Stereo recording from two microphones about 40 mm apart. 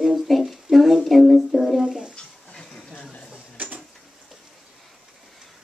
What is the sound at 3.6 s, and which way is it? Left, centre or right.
Tick-tock, right.